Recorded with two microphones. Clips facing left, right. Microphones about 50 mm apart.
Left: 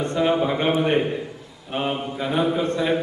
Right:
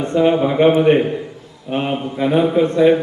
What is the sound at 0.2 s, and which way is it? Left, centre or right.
A man's voice, centre.